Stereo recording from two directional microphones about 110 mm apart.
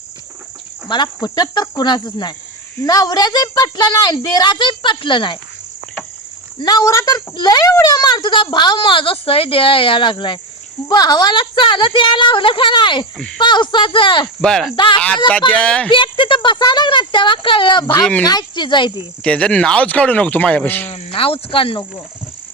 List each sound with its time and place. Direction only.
0.9 s a child's voice: 45° left (ahead or behind)
6.6 s a woman's voice: 35° left (ahead or behind)
14.4 s speech: 5° left (ahead or behind)
15.9 s a child's voice: 50° left (ahead or behind)
19.2 s speech: 10° left (ahead or behind)
20.9 s speech: 60° left (ahead or behind)